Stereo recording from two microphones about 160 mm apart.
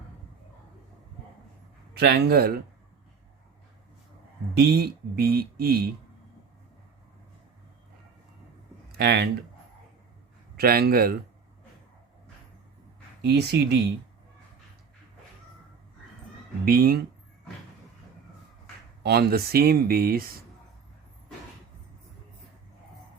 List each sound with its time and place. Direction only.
2.0 s speech: 90° right
4.5 s speech: 80° right
8.9 s speech: 90° right
10.6 s speech: 75° right (ahead or behind)
13.2 s speech: 90° right
16.6 s speech: 70° right (ahead or behind)
19.0 s speech: 90° right; by 20.3 s 70° right (ahead or behind)